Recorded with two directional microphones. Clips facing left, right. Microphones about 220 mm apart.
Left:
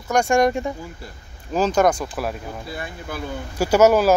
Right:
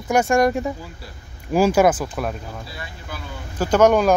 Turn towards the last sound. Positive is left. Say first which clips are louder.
# even
turn(degrees=5)  # may be behind; listen again after turning